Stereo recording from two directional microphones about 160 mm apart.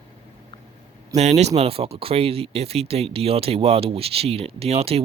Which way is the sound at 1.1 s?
45° right (ahead or behind).